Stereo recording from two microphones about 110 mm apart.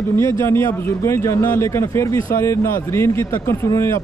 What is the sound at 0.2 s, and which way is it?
Speech, 25° left (ahead or behind).